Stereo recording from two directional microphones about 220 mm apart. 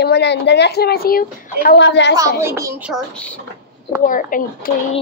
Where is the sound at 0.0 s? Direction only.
50° left (ahead or behind).